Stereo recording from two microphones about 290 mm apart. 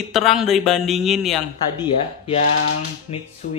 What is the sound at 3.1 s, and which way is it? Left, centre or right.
Speech, left.